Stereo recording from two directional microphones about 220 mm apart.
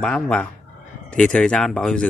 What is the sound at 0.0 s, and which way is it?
Speech, 5° left (ahead or behind).